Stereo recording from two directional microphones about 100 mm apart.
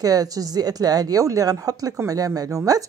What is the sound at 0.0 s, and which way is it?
Speech, 40° right (ahead or behind).